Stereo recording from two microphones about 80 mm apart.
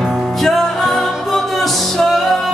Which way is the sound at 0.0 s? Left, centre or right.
Centre.